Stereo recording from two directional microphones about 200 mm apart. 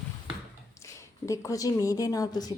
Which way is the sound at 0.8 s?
15° left (ahead or behind).